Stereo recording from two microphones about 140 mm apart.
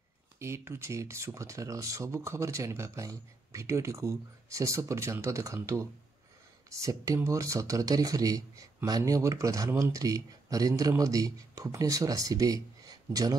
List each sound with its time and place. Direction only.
0.4 s speech: 20° right (ahead or behind)